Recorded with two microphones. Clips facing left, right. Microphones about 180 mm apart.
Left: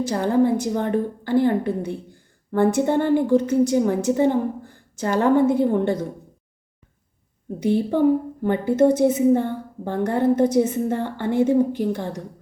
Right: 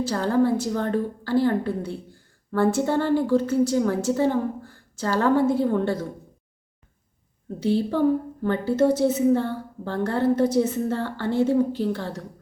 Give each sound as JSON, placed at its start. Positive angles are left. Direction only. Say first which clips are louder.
{"t": 0.0, "sound": "a woman's voice", "louder": "left 2 dB", "side_deg": 15}
{"t": 7.6, "sound": "a woman's voice", "louder": "left 3 dB", "side_deg": 15}